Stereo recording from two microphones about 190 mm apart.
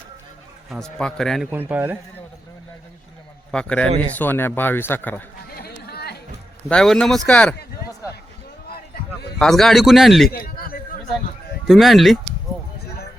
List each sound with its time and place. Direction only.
0.7 s a man's voice: 5° left (ahead or behind)
1.5 s a man's voice: 10° right (ahead or behind)
3.5 s a man's voice: 5° left (ahead or behind)
5.5 s chatter: 55° left (ahead or behind)
6.7 s a man's voice: 5° left (ahead or behind)
8.9 s a sound: 55° left (ahead or behind)
9.4 s a man's voice: centre (ahead or behind)
10.2 s a sound: 50° left (ahead or behind)
11.7 s a man's voice: centre (ahead or behind)